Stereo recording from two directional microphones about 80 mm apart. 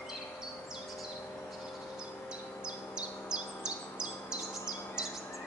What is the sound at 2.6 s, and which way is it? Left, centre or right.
Bird, centre.